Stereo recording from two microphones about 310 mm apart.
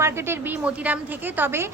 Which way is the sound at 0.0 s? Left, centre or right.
Centre.